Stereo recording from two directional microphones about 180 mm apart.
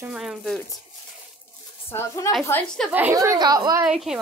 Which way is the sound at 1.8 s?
15° left (ahead or behind).